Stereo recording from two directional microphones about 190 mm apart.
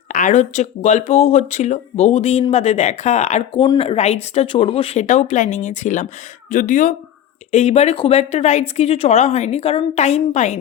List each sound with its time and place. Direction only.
0.1 s speech: 40° left (ahead or behind)
3.6 s speech: 25° left (ahead or behind)